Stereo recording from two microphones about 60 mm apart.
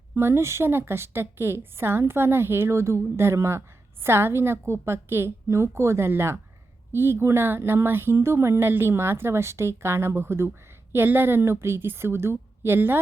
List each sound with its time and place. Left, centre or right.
0.2 s speech: right